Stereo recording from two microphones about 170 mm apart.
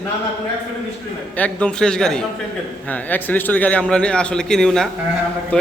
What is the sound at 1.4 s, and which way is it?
A man's voice, 5° left (ahead or behind).